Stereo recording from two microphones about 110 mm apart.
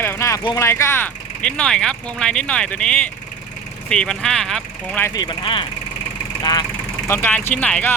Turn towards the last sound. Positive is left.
turn(degrees=10)  # may be behind; listen again after turning